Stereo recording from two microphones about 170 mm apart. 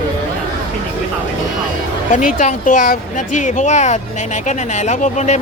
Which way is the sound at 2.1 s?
50° left (ahead or behind).